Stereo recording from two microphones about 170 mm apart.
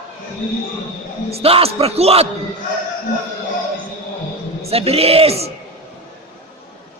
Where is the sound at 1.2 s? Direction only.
35° right (ahead or behind).